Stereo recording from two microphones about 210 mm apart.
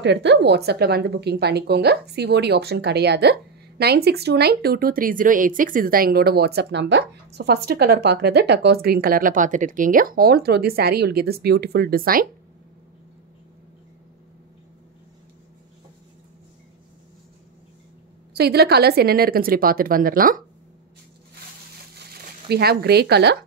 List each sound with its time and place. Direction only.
0.0 s speech: 55° right (ahead or behind)
18.3 s speech: 50° right (ahead or behind)
21.9 s a sound: 50° right (ahead or behind)